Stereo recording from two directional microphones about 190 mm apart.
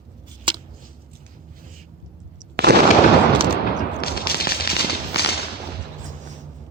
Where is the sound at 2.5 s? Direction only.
55° right (ahead or behind).